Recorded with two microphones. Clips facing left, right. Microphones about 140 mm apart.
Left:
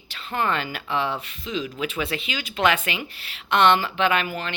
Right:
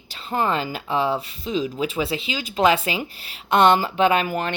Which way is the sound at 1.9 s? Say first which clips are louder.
Right 3 dB; 30° right (ahead or behind).